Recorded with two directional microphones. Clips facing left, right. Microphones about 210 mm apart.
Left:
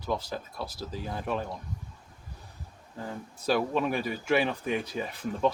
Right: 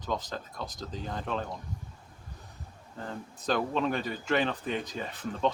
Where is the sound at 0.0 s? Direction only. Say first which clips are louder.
Left 2 dB; 10° left (ahead or behind).